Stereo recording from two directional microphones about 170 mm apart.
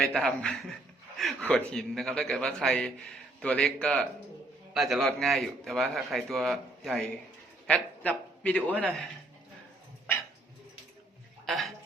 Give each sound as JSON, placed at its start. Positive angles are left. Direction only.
{"t": 0.0, "sound": "a man's voice", "side_deg": 5}
{"t": 11.4, "sound": "speech", "side_deg": 0}